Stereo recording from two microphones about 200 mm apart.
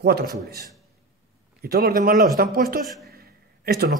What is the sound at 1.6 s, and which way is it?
A man's voice, 50° right (ahead or behind).